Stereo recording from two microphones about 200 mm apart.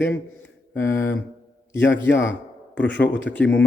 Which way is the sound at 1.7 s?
65° left (ahead or behind).